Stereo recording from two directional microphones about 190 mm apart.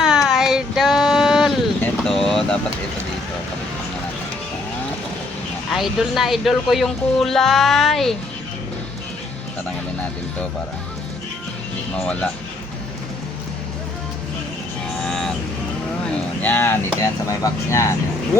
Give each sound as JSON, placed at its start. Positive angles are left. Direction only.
{"t": 0.0, "sound": "a sound", "side_deg": 0}
{"t": 5.7, "sound": "speech", "side_deg": 0}
{"t": 15.0, "sound": "vehicle", "side_deg": 0}
{"t": 16.0, "sound": "boat", "side_deg": 10}
{"t": 17.0, "sound": "speech", "side_deg": 15}